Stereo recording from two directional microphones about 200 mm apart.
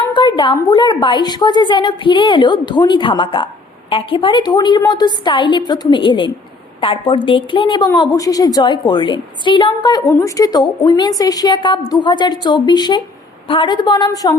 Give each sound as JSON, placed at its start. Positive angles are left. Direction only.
{"t": 0.1, "sound": "a woman's voice", "side_deg": 25}